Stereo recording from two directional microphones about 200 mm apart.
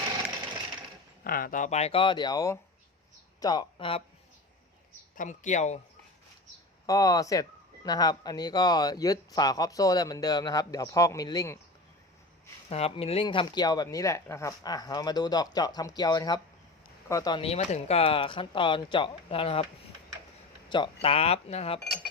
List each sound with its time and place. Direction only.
1.2 s speech: 45° left (ahead or behind); by 4.0 s 25° left (ahead or behind)
5.1 s speech: 40° left (ahead or behind)
6.8 s speech: 15° left (ahead or behind)
12.6 s speech: 30° left (ahead or behind)
20.7 s speech: 25° left (ahead or behind)